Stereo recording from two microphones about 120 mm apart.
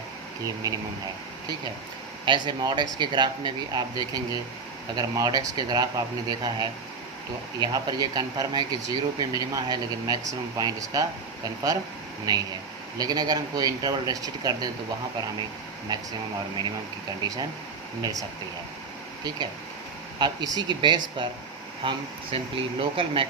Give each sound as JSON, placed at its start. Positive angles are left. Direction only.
{"t": 0.6, "sound": "speech", "side_deg": -30}
{"t": 2.2, "sound": "speech", "side_deg": -40}
{"t": 12.3, "sound": "speech", "side_deg": -30}
{"t": 15.9, "sound": "speech", "side_deg": -30}
{"t": 18.0, "sound": "speech", "side_deg": -30}
{"t": 20.1, "sound": "speech", "side_deg": -35}